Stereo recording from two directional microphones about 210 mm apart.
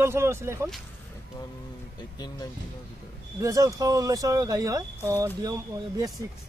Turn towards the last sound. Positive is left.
turn(degrees=-15)  # may be behind; listen again after turning